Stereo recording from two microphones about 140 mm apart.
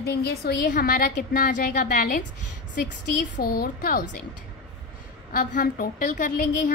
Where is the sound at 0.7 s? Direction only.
90° left.